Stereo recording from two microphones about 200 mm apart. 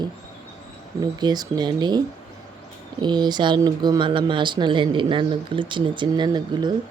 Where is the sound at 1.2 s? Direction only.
20° right (ahead or behind).